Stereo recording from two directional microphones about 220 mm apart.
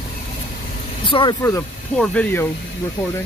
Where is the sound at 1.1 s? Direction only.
20° left (ahead or behind).